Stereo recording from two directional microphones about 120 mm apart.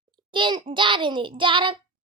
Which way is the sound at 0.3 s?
40° right (ahead or behind).